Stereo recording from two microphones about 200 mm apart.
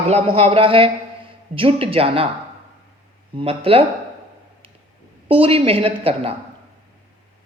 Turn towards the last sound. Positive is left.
turn(degrees=-30)  # may be behind; listen again after turning